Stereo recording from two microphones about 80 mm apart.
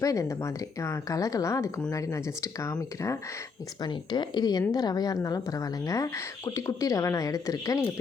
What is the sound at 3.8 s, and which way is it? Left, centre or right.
A woman's voice, left.